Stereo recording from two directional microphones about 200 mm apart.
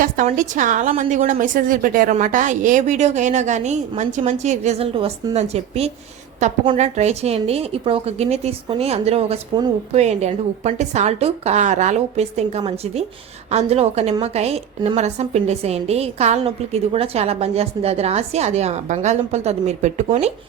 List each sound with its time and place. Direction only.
0.0 s a woman's voice: 40° right (ahead or behind)